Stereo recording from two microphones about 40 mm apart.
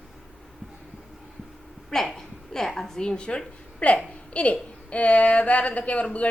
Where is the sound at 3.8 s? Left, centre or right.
Left.